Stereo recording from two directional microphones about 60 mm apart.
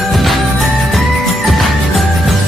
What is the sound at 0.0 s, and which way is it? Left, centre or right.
Music, centre.